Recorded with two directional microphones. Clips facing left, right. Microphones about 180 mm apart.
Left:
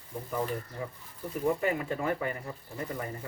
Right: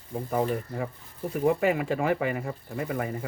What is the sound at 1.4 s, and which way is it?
Speech, 80° right.